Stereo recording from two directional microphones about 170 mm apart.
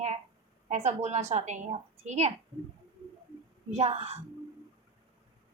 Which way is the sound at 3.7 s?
40° right (ahead or behind).